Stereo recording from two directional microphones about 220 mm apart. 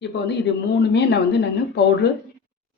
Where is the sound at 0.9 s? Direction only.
50° left (ahead or behind).